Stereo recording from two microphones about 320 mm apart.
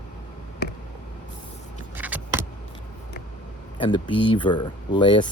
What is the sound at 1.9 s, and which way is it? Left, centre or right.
Vehicle, centre.